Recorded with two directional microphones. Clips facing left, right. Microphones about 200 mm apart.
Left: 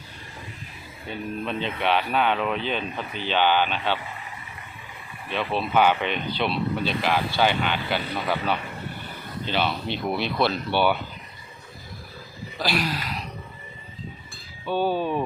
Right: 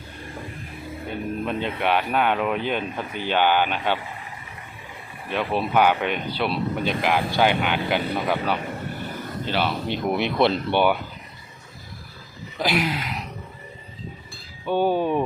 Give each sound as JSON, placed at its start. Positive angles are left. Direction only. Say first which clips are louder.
{"t": 1.5, "sound": "speech", "louder": "right 1 dB", "side_deg": -10}
{"t": 5.3, "sound": "speech", "louder": "right 2 dB", "side_deg": -10}
{"t": 12.5, "sound": "speech", "louder": "right 3 dB", "side_deg": -20}
{"t": 14.7, "sound": "speech", "louder": "right 3 dB", "side_deg": -15}